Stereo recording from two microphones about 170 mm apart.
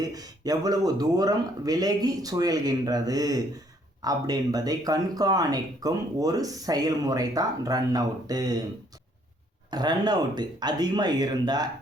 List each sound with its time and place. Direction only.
0.0 s speech: 20° right (ahead or behind)
9.6 s speech: 25° right (ahead or behind)